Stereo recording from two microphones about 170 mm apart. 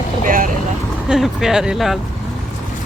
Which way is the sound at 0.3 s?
55° right (ahead or behind).